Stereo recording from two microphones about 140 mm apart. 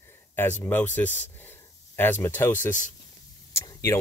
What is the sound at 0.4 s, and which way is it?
Speech, 15° left (ahead or behind).